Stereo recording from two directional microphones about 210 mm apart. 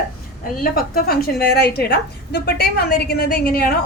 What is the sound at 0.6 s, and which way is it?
A woman's voice, 45° left (ahead or behind).